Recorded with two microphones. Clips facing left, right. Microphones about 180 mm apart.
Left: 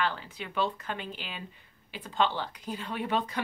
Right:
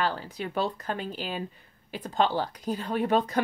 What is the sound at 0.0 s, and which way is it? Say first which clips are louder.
A woman's voice: right 3 dB; 40° right (ahead or behind).